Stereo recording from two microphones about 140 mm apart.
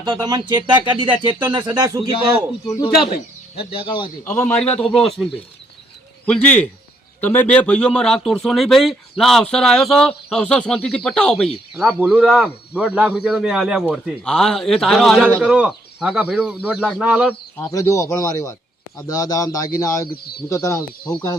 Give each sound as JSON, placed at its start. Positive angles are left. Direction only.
{"t": 0.0, "sound": "speech", "side_deg": -30}
{"t": 2.6, "sound": "speech", "side_deg": 35}
{"t": 4.2, "sound": "a man's voice", "side_deg": 15}
{"t": 12.0, "sound": "speech", "side_deg": -10}
{"t": 17.7, "sound": "a man's voice", "side_deg": 25}